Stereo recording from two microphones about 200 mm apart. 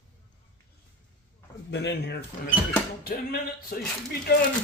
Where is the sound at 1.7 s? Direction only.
60° left (ahead or behind).